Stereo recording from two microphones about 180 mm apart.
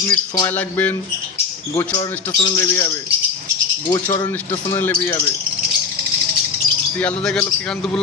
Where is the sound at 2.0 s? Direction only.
25° left (ahead or behind).